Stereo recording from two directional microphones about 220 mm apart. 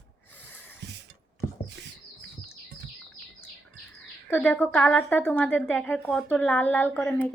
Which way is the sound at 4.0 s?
5° left (ahead or behind).